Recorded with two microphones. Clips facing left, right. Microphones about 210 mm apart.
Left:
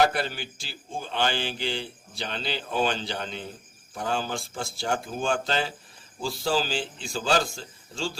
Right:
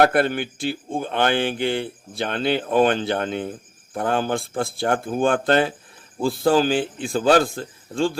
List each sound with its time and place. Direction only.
0.0 s a man's voice: 55° right (ahead or behind)